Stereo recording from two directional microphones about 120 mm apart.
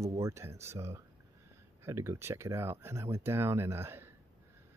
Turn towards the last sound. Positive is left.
turn(degrees=-20)  # may be behind; listen again after turning